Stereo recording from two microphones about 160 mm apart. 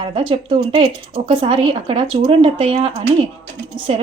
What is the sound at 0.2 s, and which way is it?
A woman's voice, 35° right (ahead or behind).